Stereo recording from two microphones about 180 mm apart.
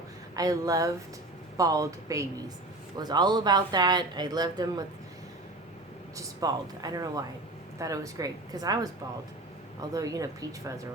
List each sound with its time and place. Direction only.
0.3 s speech: 20° right (ahead or behind)
6.1 s speech: 20° right (ahead or behind)
9.9 s speech: 20° right (ahead or behind)